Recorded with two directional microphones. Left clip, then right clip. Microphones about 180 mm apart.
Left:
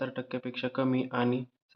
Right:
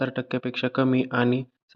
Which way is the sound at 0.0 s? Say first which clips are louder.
Right 7 dB; 35° right (ahead or behind).